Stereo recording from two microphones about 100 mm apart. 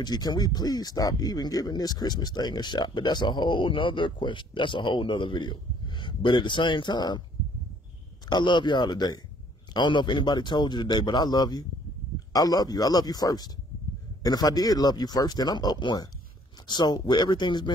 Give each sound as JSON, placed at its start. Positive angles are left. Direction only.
{"t": 0.0, "sound": "speech", "side_deg": 45}
{"t": 8.3, "sound": "speech", "side_deg": 50}